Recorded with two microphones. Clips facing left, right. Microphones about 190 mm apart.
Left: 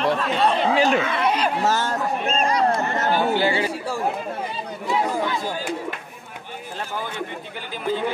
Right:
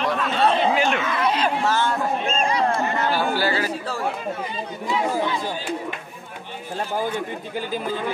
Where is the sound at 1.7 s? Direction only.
40° left (ahead or behind).